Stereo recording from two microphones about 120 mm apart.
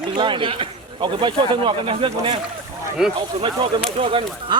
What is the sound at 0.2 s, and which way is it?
A man's voice, 45° right (ahead or behind).